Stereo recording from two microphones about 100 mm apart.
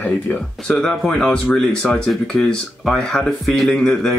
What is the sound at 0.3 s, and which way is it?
Speech, 15° left (ahead or behind).